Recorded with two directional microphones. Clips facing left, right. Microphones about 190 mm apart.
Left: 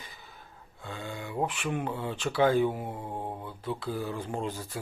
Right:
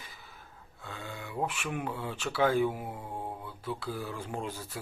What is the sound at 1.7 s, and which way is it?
Speech, 25° left (ahead or behind).